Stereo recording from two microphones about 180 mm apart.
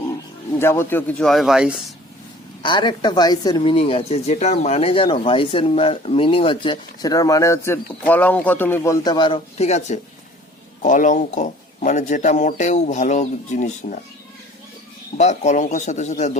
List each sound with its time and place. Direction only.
0.6 s speech: 15° left (ahead or behind); by 1.7 s 5° right (ahead or behind)
2.6 s speech: 25° left (ahead or behind)
9.6 s speech: 40° left (ahead or behind)
15.2 s speech: 40° left (ahead or behind)